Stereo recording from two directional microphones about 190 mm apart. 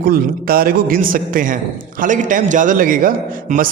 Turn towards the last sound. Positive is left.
turn(degrees=-45)  # may be behind; listen again after turning